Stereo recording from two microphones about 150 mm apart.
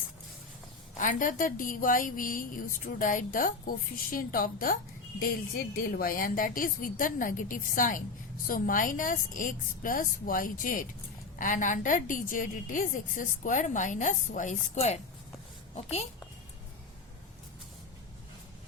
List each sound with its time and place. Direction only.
0.9 s a woman's voice: 65° left (ahead or behind); by 16.0 s 45° left (ahead or behind)